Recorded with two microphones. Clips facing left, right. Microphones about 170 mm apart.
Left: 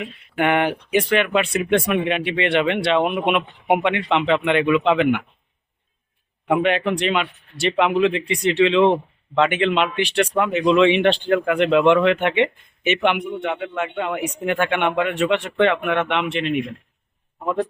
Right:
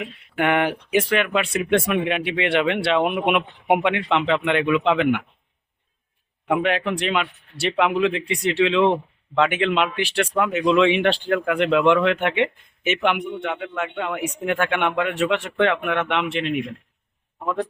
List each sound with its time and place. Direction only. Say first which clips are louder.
0.0 s speech: left 1 dB; centre (ahead or behind)
6.5 s speech: left 2 dB; centre (ahead or behind)
17.4 s a man's voice: left 2 dB; 20° left (ahead or behind)